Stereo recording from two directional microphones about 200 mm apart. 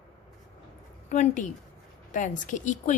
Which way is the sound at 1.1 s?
40° left (ahead or behind).